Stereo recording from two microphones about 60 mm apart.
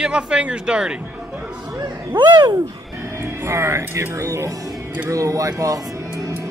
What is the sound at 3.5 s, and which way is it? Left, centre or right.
Speech, right.